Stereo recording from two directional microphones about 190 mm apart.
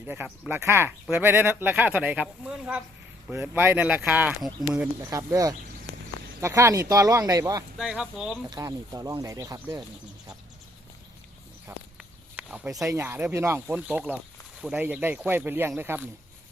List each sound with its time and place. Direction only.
0.0 s speech: 10° right (ahead or behind)
7.8 s speech: 5° right (ahead or behind)
8.4 s speech: 15° right (ahead or behind)
11.9 s a sound: 5° right (ahead or behind)
12.9 s speech: 10° right (ahead or behind)